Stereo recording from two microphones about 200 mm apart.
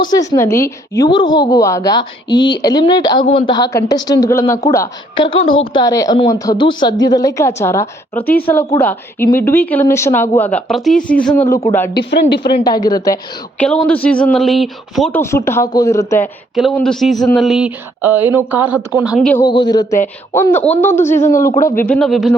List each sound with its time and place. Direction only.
0.0 s a woman's voice: 20° left (ahead or behind)
5.4 s a woman's voice: 25° left (ahead or behind)
12.6 s a woman's voice: 20° left (ahead or behind)
13.6 s speech: 5° left (ahead or behind)
15.2 s a woman's voice: 15° left (ahead or behind)
16.6 s speech: centre (ahead or behind)
19.3 s a woman's voice: 15° left (ahead or behind)
21.2 s a man's voice: 40° left (ahead or behind)
21.8 s speech: centre (ahead or behind)